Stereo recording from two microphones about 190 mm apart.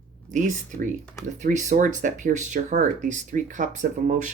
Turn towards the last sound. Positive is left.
turn(degrees=-45)  # may be behind; listen again after turning